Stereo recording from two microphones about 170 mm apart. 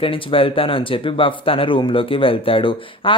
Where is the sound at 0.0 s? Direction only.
30° left (ahead or behind).